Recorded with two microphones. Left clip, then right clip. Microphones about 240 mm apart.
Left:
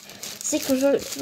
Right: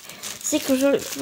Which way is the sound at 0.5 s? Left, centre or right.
Right.